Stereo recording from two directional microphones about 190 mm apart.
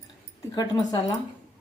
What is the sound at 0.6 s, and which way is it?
Speech, 20° left (ahead or behind).